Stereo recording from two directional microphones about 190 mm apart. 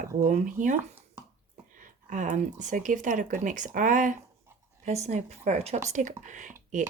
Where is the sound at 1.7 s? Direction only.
40° right (ahead or behind).